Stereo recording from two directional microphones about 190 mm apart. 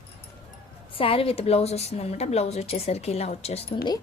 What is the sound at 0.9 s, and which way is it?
A woman's voice, 30° left (ahead or behind).